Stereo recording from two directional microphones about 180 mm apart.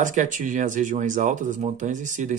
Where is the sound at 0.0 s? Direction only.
45° right (ahead or behind).